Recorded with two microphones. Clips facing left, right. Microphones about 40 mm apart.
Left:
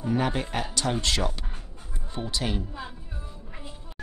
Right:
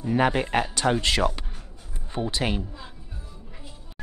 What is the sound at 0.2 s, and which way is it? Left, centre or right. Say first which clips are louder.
Speech: right 5 dB; right.